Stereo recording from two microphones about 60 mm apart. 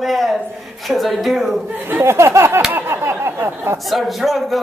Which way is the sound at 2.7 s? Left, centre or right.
Right.